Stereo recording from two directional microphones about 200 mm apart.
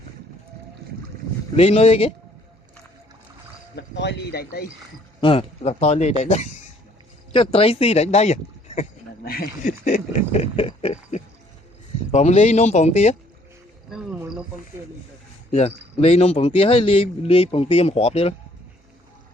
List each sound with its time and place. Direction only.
1.5 s a man's voice: 30° left (ahead or behind)
3.8 s speech: 55° left (ahead or behind)
5.2 s a sound: 30° left (ahead or behind)
9.2 s a sound: 45° left (ahead or behind); by 13.1 s 30° left (ahead or behind)
13.9 s speech: 5° right (ahead or behind)
16.0 s a man's voice: 30° left (ahead or behind)